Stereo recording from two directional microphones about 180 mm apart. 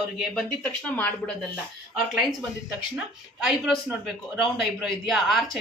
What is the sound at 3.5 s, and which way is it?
Speech, centre (ahead or behind).